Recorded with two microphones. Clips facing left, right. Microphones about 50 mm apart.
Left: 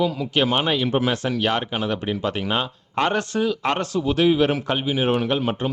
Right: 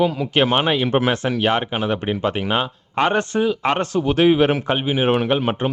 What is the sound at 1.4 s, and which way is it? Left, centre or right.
Speech, right.